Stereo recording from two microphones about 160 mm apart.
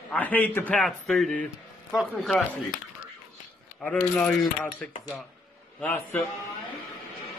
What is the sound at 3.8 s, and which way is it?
Speech, 5° left (ahead or behind).